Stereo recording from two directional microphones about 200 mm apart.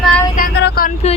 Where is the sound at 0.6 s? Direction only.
50° left (ahead or behind).